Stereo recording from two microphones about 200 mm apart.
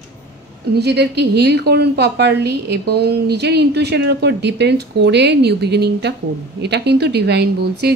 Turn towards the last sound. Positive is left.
turn(degrees=-55)  # may be behind; listen again after turning